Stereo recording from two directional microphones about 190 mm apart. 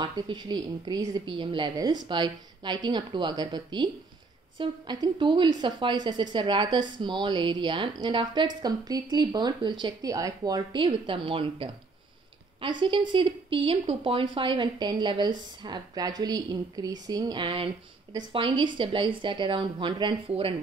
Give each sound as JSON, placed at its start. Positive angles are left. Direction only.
{"t": 0.0, "sound": "speech", "side_deg": -25}